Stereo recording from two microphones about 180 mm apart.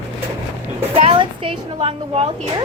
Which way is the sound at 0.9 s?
30° right (ahead or behind).